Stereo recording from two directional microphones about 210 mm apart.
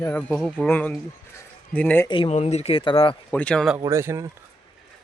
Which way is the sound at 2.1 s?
30° left (ahead or behind).